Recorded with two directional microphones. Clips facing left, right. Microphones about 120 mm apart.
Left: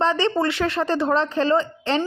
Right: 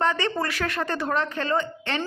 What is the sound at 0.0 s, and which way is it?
A woman's voice, 30° left (ahead or behind).